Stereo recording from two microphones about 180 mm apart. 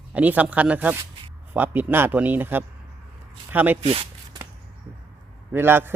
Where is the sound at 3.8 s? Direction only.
30° right (ahead or behind).